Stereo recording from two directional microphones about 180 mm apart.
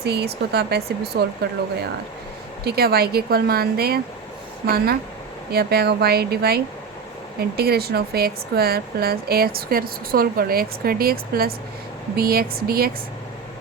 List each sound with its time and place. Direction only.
0.0 s speech: 65° right (ahead or behind)
2.6 s speech: 60° right (ahead or behind)